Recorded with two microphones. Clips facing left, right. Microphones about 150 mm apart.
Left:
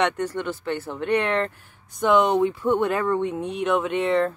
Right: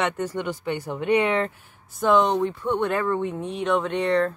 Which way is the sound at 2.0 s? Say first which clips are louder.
Left 1 dB; centre (ahead or behind).